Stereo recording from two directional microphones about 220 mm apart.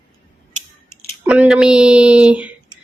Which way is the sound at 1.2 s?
5° right (ahead or behind).